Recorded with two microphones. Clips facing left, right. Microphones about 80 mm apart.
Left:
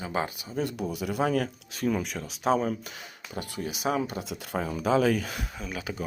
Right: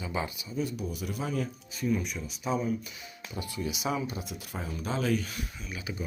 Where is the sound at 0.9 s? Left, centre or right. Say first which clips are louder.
Left 7 dB; left.